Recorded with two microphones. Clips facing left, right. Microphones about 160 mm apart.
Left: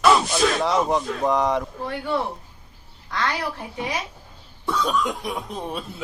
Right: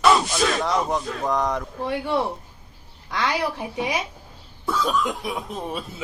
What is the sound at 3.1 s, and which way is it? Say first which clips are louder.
Speech: right 2 dB; 10° right (ahead or behind).